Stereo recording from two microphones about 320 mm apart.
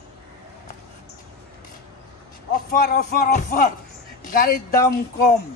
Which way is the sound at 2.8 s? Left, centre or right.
Left.